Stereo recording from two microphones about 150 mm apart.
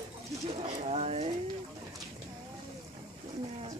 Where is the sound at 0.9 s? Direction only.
45° right (ahead or behind).